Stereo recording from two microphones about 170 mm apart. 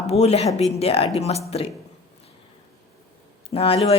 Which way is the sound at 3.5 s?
35° left (ahead or behind).